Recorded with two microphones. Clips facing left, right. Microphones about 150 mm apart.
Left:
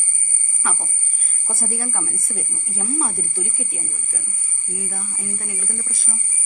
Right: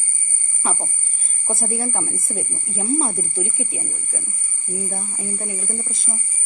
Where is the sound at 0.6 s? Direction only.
25° right (ahead or behind).